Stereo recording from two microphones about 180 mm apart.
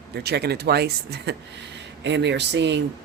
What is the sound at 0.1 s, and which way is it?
Speech, 65° right (ahead or behind).